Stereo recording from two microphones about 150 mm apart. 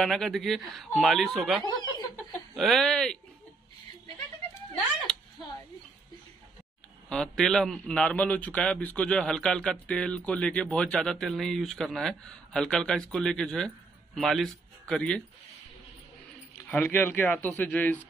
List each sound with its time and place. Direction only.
0.0 s a man's voice: centre (ahead or behind)
1.6 s speech: 25° left (ahead or behind)
2.5 s a man's voice: centre (ahead or behind)
7.1 s a man's voice: 5° left (ahead or behind)
16.5 s speech: 10° left (ahead or behind)